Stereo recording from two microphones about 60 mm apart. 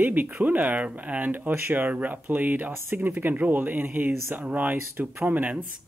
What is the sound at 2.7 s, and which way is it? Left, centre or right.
Speech, right.